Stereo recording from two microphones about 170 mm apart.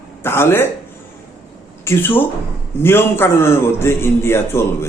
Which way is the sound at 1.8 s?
15° left (ahead or behind).